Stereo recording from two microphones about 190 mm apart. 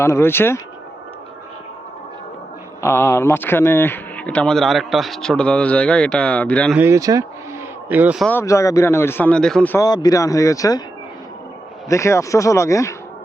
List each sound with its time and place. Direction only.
0.0 s speech: 15° left (ahead or behind)
2.8 s speech: 15° left (ahead or behind)
6.7 s speech: 15° right (ahead or behind)
8.3 s speech: 15° left (ahead or behind)
9.8 s speech: 20° left (ahead or behind)
11.9 s speech: 15° left (ahead or behind)